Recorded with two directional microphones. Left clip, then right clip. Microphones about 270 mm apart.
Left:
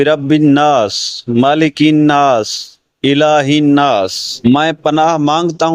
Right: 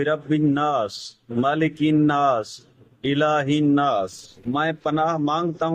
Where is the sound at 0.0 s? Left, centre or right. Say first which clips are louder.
Left 11 dB; left.